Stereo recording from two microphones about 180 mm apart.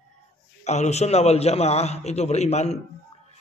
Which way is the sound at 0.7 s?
40° left (ahead or behind).